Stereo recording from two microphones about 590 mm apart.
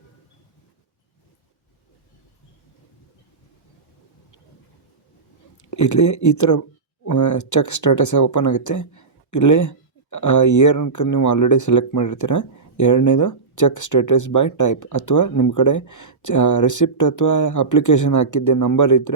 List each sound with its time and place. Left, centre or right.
5.7 s speech: left